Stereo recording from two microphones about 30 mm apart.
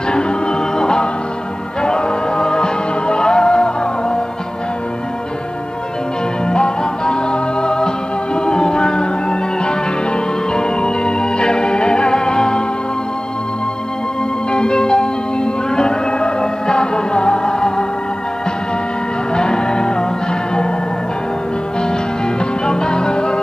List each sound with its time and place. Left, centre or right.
0.1 s music: left
6.4 s music: left
14.5 s music: left
19.3 s music: left
22.7 s music: left